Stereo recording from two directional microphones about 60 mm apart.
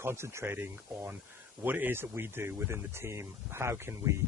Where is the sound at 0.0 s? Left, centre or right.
Right.